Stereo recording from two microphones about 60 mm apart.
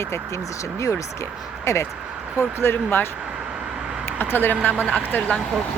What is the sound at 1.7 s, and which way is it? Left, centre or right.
Speech, left.